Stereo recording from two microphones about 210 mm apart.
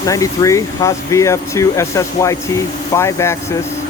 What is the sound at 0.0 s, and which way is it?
Speech, 15° left (ahead or behind).